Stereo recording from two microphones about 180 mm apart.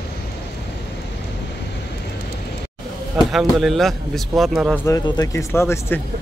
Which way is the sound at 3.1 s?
Centre (ahead or behind).